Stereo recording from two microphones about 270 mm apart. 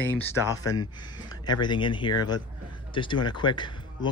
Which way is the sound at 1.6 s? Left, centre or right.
Centre.